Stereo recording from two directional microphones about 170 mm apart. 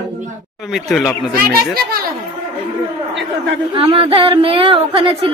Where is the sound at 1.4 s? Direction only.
65° right (ahead or behind).